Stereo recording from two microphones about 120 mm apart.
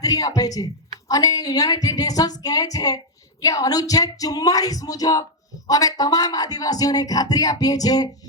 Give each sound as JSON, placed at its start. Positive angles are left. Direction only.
{"t": 0.0, "sound": "a woman's voice", "side_deg": 30}